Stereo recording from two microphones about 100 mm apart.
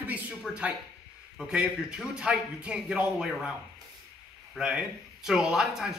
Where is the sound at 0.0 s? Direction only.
15° right (ahead or behind).